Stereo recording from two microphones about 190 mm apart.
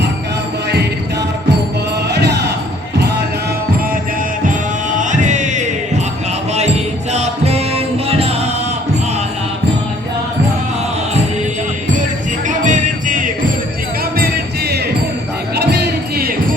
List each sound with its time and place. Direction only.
2.1 s music: 60° right (ahead or behind)
4.4 s music: 40° right (ahead or behind)
7.1 s music: 35° right (ahead or behind)
12.5 s music: 40° right (ahead or behind)
15.5 s music: 60° right (ahead or behind)